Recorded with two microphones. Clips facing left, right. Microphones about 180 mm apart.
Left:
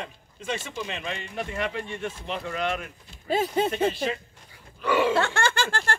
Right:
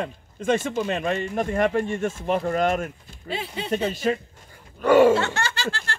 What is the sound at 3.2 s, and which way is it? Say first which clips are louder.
Speech: left 7 dB; 45° left (ahead or behind).